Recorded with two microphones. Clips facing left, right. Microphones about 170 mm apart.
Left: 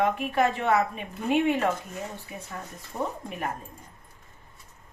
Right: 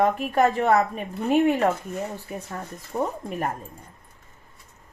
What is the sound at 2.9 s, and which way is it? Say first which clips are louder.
Speech: right 5 dB; 50° right (ahead or behind).